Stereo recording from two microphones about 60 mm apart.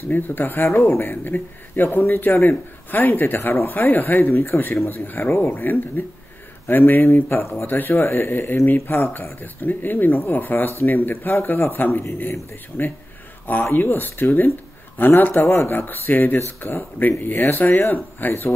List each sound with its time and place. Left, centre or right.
0.1 s a man's voice: left
0.7 s a man's voice: left
13.7 s a man's voice: left